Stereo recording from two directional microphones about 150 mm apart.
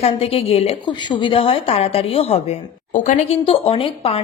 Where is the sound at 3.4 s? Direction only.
40° left (ahead or behind).